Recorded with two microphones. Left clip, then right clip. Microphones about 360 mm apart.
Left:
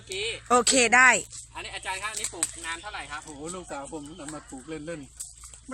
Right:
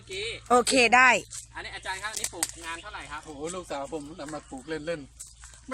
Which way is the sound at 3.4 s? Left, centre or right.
Right.